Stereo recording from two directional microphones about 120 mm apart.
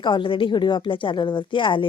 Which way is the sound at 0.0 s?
40° left (ahead or behind).